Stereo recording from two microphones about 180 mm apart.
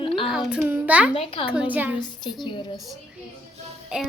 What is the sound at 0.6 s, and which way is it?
Speech, 10° right (ahead or behind).